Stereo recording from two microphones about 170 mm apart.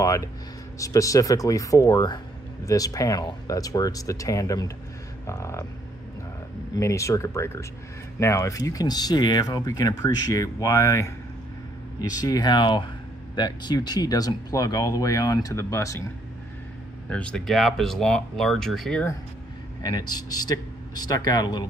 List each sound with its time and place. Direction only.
0.0 s a sound: 20° left (ahead or behind)
0.7 s speech: 20° left (ahead or behind)
6.7 s speech: 20° left (ahead or behind)
17.1 s speech: 5° left (ahead or behind)
19.8 s speech: 25° left (ahead or behind)